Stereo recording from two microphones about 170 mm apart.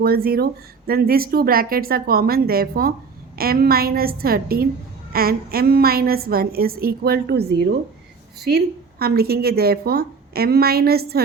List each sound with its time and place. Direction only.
0.0 s speech: 65° right (ahead or behind); by 7.8 s 80° right
8.4 s speech: 70° right (ahead or behind)